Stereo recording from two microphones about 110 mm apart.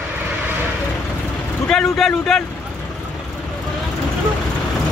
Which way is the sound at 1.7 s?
5° left (ahead or behind).